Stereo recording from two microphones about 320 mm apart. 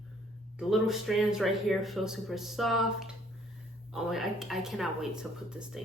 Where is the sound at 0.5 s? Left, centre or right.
Centre.